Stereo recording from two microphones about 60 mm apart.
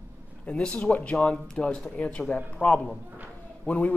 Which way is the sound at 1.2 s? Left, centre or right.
Centre.